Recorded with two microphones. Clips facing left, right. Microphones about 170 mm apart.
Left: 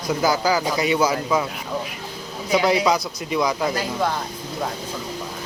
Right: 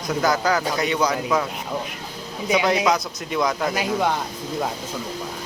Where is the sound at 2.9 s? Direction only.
5° left (ahead or behind).